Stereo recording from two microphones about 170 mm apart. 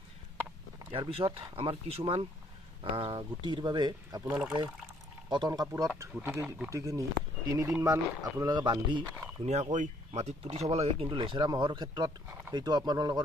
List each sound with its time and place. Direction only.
0.9 s speech: 30° right (ahead or behind)
4.2 s speech: 5° right (ahead or behind)
5.3 s speech: 25° right (ahead or behind)
9.4 s speech: 40° right (ahead or behind); by 13.2 s 25° right (ahead or behind)